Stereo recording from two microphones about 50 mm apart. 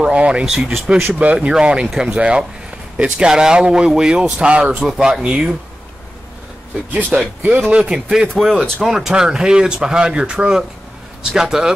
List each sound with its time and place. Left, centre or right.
0.0 s speech: right
1.0 s speech: right
6.9 s speech: right
7.7 s speech: centre
8.4 s speech: centre